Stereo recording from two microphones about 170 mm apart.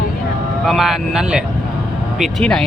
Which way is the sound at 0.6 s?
Centre (ahead or behind).